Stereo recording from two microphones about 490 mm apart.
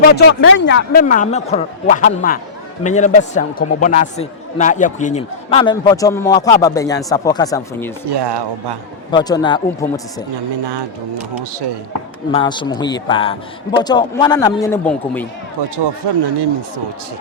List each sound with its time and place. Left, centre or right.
0.2 s a man's voice: left; by 7.9 s centre
8.1 s speech: right
9.1 s a man's voice: centre
12.3 s a man's voice: centre
15.7 s speech: right